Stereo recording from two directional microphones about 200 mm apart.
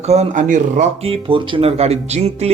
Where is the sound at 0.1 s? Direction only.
35° right (ahead or behind).